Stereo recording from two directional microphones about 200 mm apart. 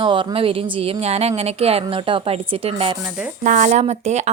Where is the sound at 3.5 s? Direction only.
40° right (ahead or behind).